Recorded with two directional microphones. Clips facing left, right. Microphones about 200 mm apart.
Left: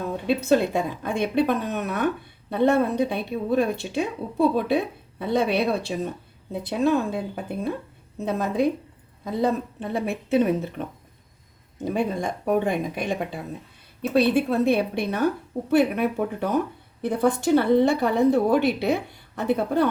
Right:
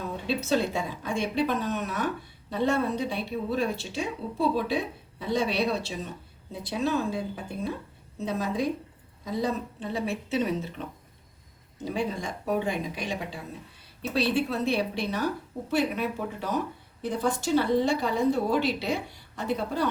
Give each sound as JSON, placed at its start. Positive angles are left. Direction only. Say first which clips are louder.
{"t": 0.3, "sound": "a woman's voice", "louder": "left 6 dB", "side_deg": 55}
{"t": 11.9, "sound": "a woman's voice", "louder": "left 5 dB", "side_deg": 55}